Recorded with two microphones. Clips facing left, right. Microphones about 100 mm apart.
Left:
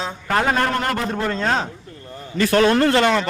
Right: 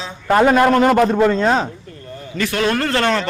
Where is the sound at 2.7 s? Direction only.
20° left (ahead or behind).